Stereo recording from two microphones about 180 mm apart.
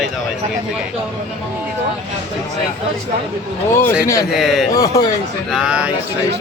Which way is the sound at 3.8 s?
15° left (ahead or behind).